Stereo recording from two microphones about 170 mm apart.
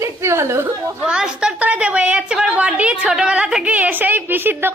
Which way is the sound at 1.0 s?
5° right (ahead or behind).